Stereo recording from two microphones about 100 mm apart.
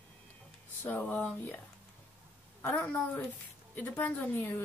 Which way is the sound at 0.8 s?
15° left (ahead or behind).